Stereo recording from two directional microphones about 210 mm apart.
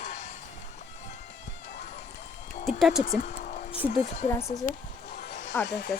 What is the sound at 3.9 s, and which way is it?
Speech, 30° left (ahead or behind).